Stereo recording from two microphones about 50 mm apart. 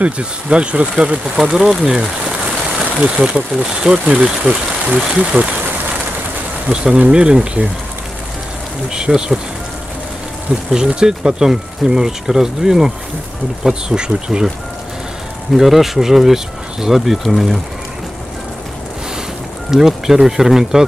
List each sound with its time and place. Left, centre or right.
0.0 s speech: right
3.0 s speech: centre
6.7 s speech: centre
8.9 s speech: centre
10.7 s speech: centre
15.5 s speech: centre
19.7 s speech: centre